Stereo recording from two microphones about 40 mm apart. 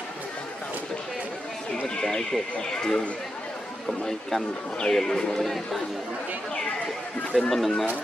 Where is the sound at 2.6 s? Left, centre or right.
Centre.